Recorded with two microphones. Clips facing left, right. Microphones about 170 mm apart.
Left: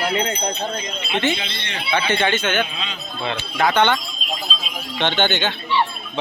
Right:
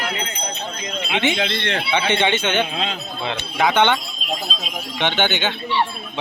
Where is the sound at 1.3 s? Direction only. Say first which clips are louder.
Right 6 dB; 70° right (ahead or behind).